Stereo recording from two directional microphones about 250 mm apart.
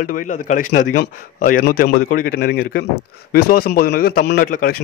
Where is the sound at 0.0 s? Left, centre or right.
Left.